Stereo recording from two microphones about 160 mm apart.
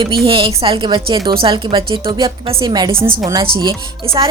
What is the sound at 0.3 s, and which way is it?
A woman's voice, 35° right (ahead or behind).